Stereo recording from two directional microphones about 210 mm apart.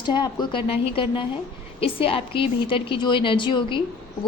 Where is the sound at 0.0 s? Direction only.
20° left (ahead or behind).